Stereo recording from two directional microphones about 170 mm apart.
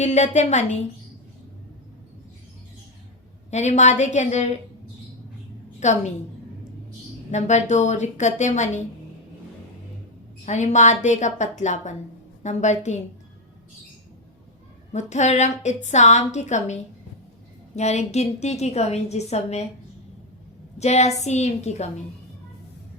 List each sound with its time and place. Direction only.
0.0 s a woman's voice: 45° left (ahead or behind)
3.5 s a woman's voice: 40° left (ahead or behind)
5.8 s a woman's voice: 45° left (ahead or behind)
7.3 s a woman's voice: 45° left (ahead or behind)
10.4 s a woman's voice: 45° left (ahead or behind)
14.9 s a woman's voice: 45° left (ahead or behind)
17.7 s a woman's voice: 40° left (ahead or behind)
20.7 s a woman's voice: 40° left (ahead or behind)